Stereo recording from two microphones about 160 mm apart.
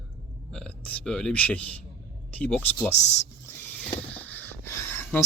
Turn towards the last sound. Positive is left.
turn(degrees=15)  # may be behind; listen again after turning